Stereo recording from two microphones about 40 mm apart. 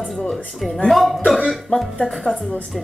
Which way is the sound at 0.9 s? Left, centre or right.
Centre.